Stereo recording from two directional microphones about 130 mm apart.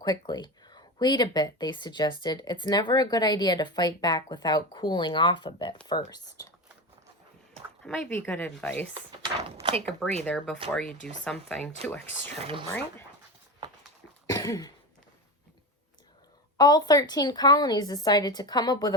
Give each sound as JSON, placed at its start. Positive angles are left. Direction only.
{"t": 0.0, "sound": "speech", "side_deg": 30}
{"t": 7.9, "sound": "speech", "side_deg": 15}
{"t": 9.4, "sound": "speech", "side_deg": -50}
{"t": 9.8, "sound": "speech", "side_deg": 5}
{"t": 14.3, "sound": "cough", "side_deg": 30}
{"t": 16.6, "sound": "speech", "side_deg": 30}